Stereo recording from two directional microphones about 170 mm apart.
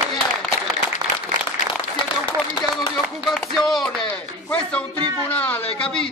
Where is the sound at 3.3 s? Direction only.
Centre (ahead or behind).